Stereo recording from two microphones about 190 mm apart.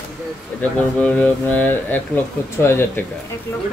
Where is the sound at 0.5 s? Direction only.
5° left (ahead or behind).